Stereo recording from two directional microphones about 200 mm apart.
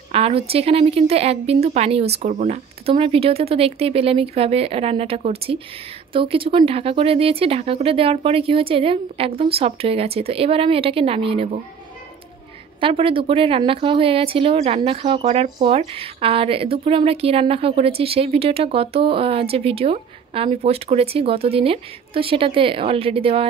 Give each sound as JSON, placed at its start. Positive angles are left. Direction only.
{"t": 0.1, "sound": "speech", "side_deg": -30}
{"t": 12.8, "sound": "speech", "side_deg": -25}